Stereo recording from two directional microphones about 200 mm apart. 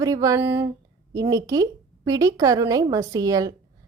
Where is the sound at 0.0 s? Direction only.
15° right (ahead or behind).